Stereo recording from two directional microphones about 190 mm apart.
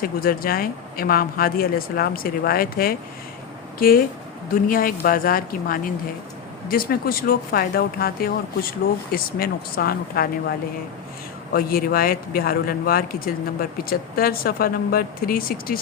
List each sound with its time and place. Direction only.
0.0 s a man's voice: 50° left (ahead or behind)
11.5 s a man's voice: 50° left (ahead or behind)